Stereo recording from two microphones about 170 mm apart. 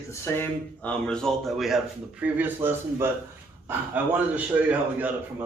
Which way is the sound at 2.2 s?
10° right (ahead or behind).